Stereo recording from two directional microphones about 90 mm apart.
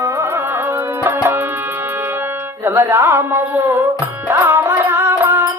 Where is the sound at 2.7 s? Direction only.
25° right (ahead or behind).